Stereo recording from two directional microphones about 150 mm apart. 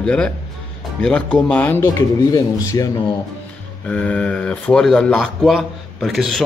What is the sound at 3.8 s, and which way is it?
Speech, 10° left (ahead or behind).